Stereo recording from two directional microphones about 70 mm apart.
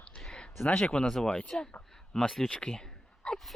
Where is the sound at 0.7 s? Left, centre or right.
Centre.